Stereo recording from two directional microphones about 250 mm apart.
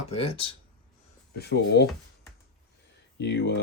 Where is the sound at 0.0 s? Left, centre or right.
Left.